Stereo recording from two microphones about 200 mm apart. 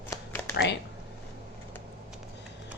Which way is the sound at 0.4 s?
60° left (ahead or behind).